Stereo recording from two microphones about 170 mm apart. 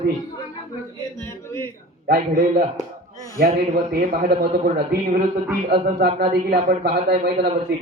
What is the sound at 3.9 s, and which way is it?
Speech, 60° right (ahead or behind).